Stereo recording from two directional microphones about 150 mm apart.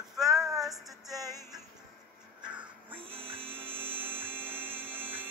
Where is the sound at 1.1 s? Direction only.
25° right (ahead or behind).